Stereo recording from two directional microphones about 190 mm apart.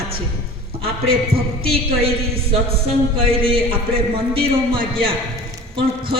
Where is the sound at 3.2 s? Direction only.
30° right (ahead or behind).